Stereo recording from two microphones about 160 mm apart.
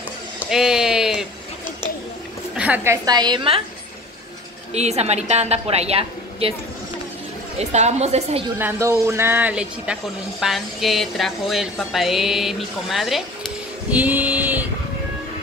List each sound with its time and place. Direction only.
0.4 s a sound: centre (ahead or behind)
2.5 s a woman's voice: 10° right (ahead or behind); by 3.6 s 35° right (ahead or behind)
4.7 s a woman's voice: 45° right (ahead or behind)
7.5 s a woman's voice: 45° right (ahead or behind)
8.5 s a man's voice: 15° right (ahead or behind)